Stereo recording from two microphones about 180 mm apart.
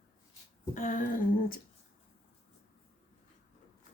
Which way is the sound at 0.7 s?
45° left (ahead or behind).